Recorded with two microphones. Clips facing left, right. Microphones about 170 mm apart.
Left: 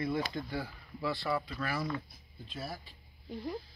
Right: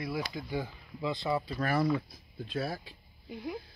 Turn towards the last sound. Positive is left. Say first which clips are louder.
# even
turn(degrees=-5)  # may be behind; listen again after turning